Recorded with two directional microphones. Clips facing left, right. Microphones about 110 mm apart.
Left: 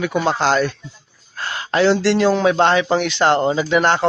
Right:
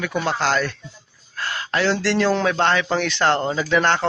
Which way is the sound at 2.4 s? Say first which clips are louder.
Left 5 dB; 20° left (ahead or behind).